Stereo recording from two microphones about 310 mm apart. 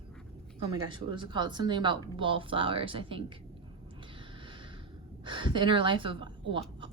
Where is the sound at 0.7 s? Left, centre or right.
Centre.